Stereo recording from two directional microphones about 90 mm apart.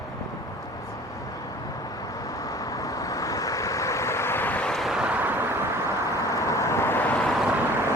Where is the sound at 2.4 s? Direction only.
40° left (ahead or behind); by 4.7 s 15° left (ahead or behind).